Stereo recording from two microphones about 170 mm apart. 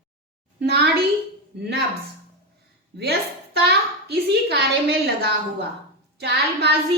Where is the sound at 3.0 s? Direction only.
75° right (ahead or behind).